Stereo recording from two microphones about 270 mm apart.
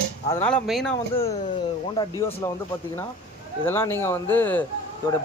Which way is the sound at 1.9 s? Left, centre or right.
Centre.